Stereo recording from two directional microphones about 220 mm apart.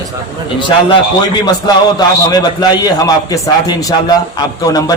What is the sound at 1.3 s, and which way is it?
A man's voice, 20° left (ahead or behind).